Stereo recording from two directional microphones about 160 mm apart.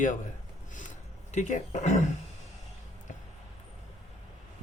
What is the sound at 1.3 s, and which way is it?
Speech, 50° left (ahead or behind).